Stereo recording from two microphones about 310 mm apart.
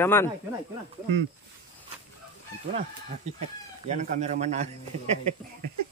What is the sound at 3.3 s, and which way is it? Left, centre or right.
Speech, right.